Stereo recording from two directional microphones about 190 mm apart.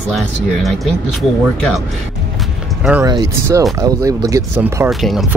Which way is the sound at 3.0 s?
20° right (ahead or behind).